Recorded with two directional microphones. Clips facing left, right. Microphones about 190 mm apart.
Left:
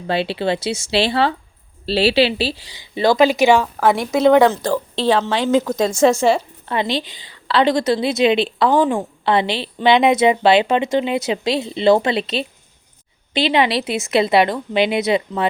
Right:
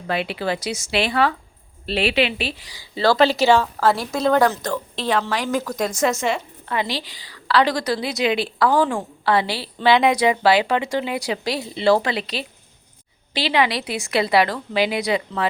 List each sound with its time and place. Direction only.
0.1 s a woman's voice: 30° left (ahead or behind)